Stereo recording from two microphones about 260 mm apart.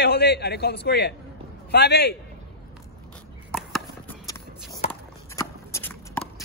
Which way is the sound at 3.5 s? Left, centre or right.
Centre.